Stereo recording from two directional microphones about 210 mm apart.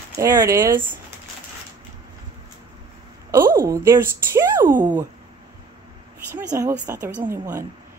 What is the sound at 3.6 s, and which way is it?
Speech, 15° right (ahead or behind).